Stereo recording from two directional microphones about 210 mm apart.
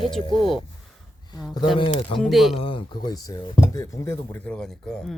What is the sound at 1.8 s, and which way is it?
Speech, 25° left (ahead or behind).